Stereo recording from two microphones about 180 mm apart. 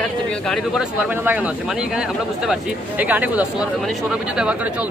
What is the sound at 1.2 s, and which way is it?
Speech, 10° right (ahead or behind).